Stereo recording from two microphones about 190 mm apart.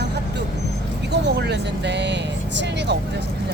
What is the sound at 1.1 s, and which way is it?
Vehicle, 60° right (ahead or behind).